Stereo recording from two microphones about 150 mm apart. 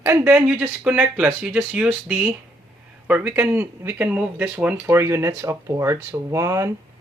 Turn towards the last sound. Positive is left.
turn(degrees=-20)  # may be behind; listen again after turning